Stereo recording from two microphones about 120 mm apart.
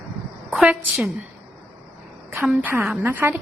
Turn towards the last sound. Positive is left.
turn(degrees=-15)  # may be behind; listen again after turning